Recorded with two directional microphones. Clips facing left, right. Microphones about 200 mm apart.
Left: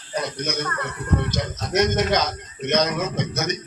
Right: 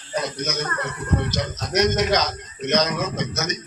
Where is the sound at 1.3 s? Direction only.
50° left (ahead or behind).